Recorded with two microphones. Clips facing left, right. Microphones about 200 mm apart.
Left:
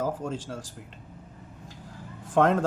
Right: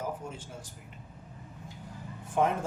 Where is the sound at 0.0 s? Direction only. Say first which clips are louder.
Left 7 dB; 90° left.